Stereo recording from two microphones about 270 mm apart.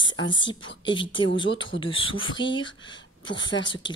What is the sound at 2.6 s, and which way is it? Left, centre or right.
A woman's voice, centre.